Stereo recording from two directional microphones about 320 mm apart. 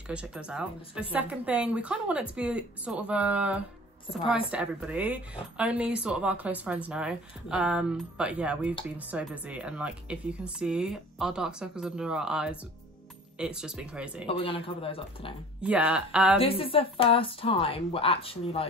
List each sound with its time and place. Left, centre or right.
0.1 s speech: centre
14.2 s speech: centre
15.6 s speech: centre
16.3 s speech: centre